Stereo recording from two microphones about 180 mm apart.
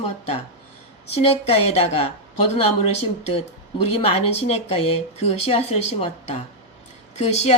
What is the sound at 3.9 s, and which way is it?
A woman's voice, 35° left (ahead or behind).